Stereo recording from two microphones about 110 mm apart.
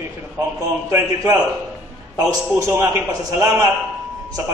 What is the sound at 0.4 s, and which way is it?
A man's voice, 25° right (ahead or behind).